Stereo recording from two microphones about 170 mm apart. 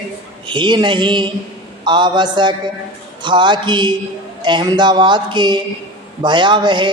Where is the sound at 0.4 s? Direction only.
30° right (ahead or behind).